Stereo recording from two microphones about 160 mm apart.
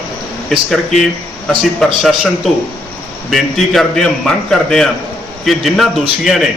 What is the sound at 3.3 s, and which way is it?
A man's voice, centre (ahead or behind).